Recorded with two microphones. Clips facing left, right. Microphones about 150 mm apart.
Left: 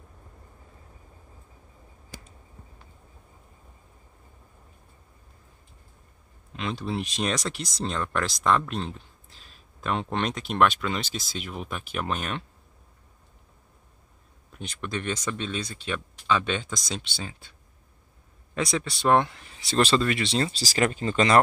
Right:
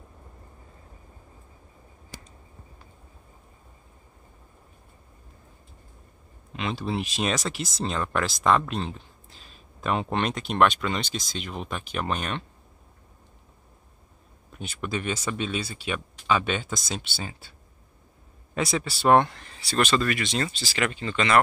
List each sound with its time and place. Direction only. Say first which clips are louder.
6.5 s speech: right 1 dB; centre (ahead or behind)
14.5 s speech: right 2 dB; 5° right (ahead or behind)
19.6 s speech: left 1 dB; 25° left (ahead or behind)
20.6 s speech: left 3 dB; 40° left (ahead or behind)